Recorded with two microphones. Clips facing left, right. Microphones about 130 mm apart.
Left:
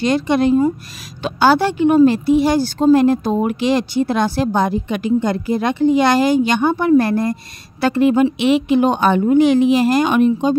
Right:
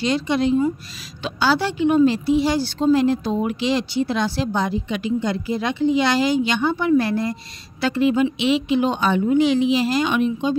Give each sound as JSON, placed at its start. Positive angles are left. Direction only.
{"t": 0.0, "sound": "speech", "side_deg": 55}